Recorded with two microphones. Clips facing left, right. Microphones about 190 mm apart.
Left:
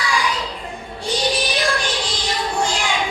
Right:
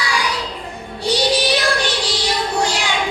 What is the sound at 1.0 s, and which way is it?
Child singing, 70° right (ahead or behind).